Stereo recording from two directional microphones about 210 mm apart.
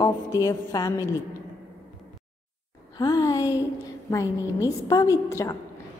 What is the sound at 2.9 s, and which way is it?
A woman's voice, 20° left (ahead or behind).